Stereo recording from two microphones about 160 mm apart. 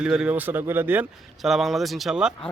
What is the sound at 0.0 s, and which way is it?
Speech, 5° right (ahead or behind).